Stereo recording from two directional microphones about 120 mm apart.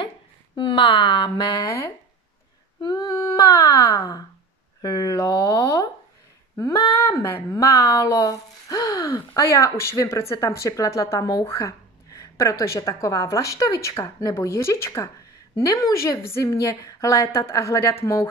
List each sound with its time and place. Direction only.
0.6 s speech: 45° left (ahead or behind)
1.5 s speech: 25° left (ahead or behind)
2.8 s a sound: 30° left (ahead or behind)
9.7 s speech: 25° left (ahead or behind)